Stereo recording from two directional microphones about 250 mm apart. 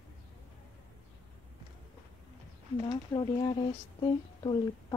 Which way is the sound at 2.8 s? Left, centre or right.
Centre.